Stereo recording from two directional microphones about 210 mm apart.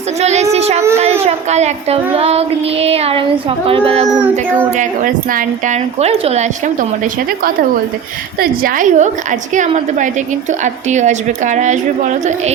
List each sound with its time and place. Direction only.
0.2 s a woman's voice: 30° right (ahead or behind)
0.5 s a sound: 30° right (ahead or behind)
1.2 s child singing: 30° right (ahead or behind)
4.1 s child singing: 10° right (ahead or behind)
4.8 s a woman's voice: 40° right (ahead or behind)
8.4 s a woman's voice: 40° right (ahead or behind)